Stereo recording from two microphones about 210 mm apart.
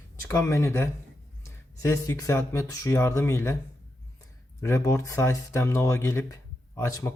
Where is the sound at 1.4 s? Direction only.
15° left (ahead or behind).